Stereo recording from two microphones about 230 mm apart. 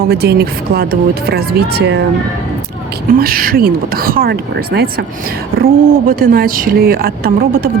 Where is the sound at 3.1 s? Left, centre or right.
Right.